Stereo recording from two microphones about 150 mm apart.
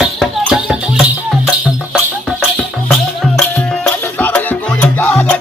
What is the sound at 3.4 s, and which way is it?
Music, 5° left (ahead or behind).